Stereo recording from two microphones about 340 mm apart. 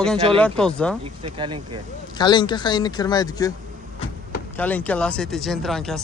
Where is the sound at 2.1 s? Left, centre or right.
Centre.